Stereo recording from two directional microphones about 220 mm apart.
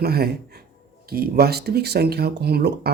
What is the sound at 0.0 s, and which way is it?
Speech, 45° right (ahead or behind).